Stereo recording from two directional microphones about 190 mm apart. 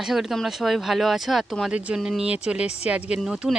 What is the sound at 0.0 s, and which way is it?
Speech, centre (ahead or behind).